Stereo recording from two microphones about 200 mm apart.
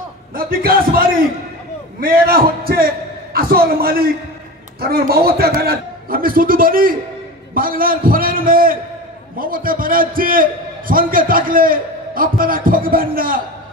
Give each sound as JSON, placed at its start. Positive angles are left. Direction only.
{"t": 0.3, "sound": "a man's voice", "side_deg": -45}